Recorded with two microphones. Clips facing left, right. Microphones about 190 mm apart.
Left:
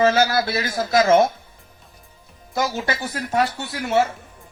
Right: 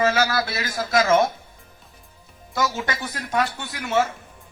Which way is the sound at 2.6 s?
35° left (ahead or behind).